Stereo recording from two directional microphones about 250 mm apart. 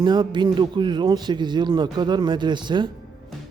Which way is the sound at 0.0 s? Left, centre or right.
Centre.